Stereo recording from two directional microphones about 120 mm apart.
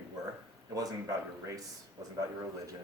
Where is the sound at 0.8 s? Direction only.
30° right (ahead or behind).